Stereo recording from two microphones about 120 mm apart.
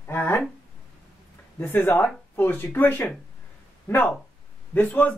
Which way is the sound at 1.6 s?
20° left (ahead or behind).